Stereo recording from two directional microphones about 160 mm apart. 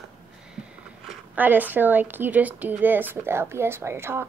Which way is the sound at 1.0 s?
10° right (ahead or behind).